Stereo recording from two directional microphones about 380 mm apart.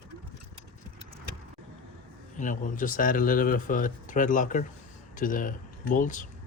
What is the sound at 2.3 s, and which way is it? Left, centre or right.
Speech, left.